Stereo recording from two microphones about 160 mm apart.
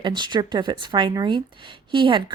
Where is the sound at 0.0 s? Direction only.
30° right (ahead or behind).